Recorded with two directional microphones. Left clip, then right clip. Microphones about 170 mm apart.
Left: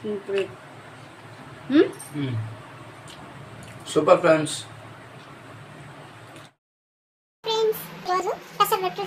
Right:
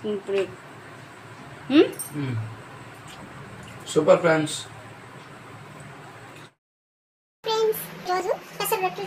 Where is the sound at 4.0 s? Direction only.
40° left (ahead or behind).